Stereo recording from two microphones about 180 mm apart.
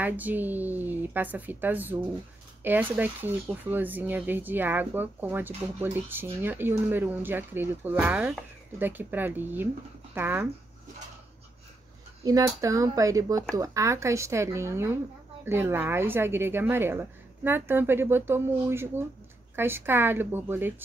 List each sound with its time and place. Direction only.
0.0 s speech: 10° right (ahead or behind)
12.3 s speech: 20° right (ahead or behind)